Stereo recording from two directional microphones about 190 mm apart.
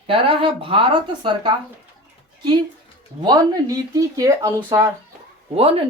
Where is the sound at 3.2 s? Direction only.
20° right (ahead or behind).